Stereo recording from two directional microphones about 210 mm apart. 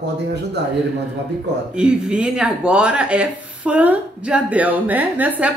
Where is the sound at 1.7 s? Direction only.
5° right (ahead or behind).